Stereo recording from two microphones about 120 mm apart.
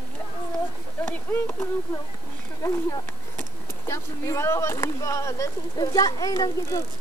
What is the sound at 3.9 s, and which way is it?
Speech, 25° left (ahead or behind).